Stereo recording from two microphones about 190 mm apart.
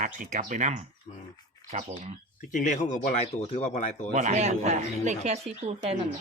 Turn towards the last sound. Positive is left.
turn(degrees=-30)  # may be behind; listen again after turning